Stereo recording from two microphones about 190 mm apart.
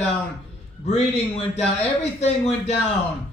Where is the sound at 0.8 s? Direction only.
35° left (ahead or behind).